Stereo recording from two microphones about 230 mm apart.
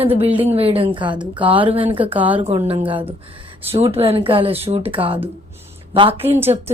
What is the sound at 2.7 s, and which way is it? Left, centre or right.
Speech, right.